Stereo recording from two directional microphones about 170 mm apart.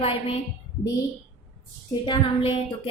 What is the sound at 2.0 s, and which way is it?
Speech, 30° left (ahead or behind).